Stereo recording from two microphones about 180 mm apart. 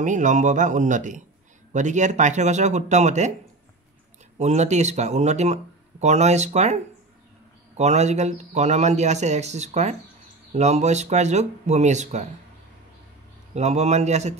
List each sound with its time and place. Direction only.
0.0 s speech: 45° right (ahead or behind)
4.4 s speech: 40° right (ahead or behind)
13.6 s speech: 40° right (ahead or behind)